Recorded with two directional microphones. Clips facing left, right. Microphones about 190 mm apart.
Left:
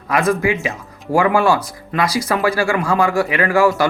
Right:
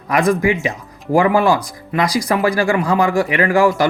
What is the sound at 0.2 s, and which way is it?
Speech, 15° right (ahead or behind).